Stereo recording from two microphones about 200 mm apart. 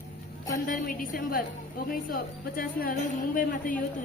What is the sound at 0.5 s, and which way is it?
A woman's voice, 45° left (ahead or behind).